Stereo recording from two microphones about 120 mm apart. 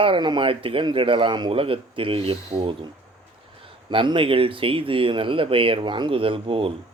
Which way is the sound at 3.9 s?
45° right (ahead or behind).